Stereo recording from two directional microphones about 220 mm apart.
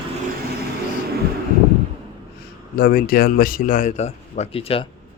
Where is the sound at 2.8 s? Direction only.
40° left (ahead or behind); by 4.8 s 25° left (ahead or behind).